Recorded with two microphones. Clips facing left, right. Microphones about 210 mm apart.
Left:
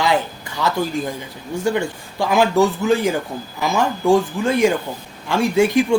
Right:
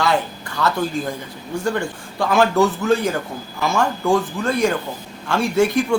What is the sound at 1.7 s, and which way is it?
Speech, 15° left (ahead or behind).